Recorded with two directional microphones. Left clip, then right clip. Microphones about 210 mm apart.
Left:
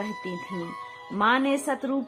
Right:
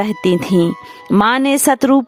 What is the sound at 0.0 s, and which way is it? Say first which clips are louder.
Speech: right 17 dB; 60° right (ahead or behind).